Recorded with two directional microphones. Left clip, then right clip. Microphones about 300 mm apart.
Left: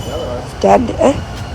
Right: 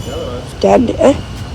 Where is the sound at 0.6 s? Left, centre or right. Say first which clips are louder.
Right 1 dB; centre.